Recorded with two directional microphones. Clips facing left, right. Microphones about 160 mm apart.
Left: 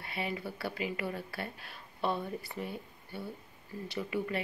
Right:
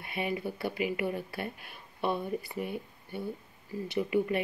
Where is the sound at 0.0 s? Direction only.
15° right (ahead or behind).